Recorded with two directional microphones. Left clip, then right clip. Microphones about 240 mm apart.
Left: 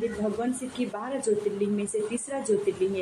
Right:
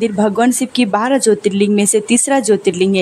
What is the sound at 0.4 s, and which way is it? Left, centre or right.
Speech, right.